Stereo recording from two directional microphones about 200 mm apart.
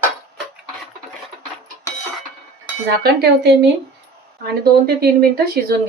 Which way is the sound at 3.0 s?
55° right (ahead or behind).